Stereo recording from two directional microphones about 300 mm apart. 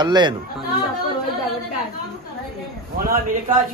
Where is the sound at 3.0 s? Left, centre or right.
Right.